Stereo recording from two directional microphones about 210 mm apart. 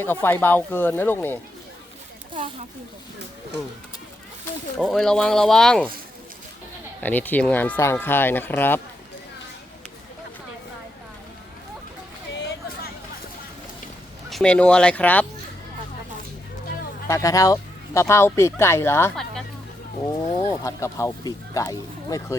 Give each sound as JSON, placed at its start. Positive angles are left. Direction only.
{"t": 0.0, "sound": "speech", "side_deg": 10}
{"t": 4.8, "sound": "speech", "side_deg": 0}
{"t": 7.0, "sound": "speech", "side_deg": 10}
{"t": 12.5, "sound": "hubbub", "side_deg": 45}
{"t": 14.3, "sound": "speech", "side_deg": 5}
{"t": 17.1, "sound": "speech", "side_deg": 15}
{"t": 19.1, "sound": "a sound", "side_deg": 0}
{"t": 20.4, "sound": "speech", "side_deg": 20}